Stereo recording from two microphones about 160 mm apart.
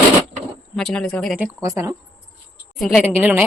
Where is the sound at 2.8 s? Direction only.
5° right (ahead or behind).